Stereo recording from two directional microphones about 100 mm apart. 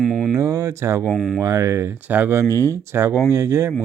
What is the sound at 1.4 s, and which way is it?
Speech, 30° right (ahead or behind).